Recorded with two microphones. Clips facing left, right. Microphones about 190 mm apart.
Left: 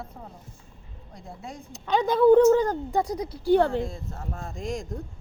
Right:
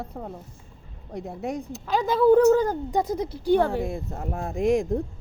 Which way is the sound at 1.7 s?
Centre (ahead or behind).